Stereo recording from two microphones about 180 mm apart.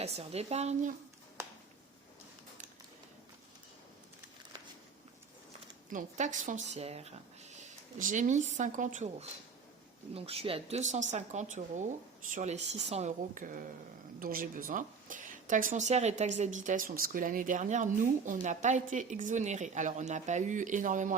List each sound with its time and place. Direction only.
0.0 s speech: 35° right (ahead or behind)
5.9 s speech: 45° right (ahead or behind)
10.2 s a woman's voice: 35° right (ahead or behind)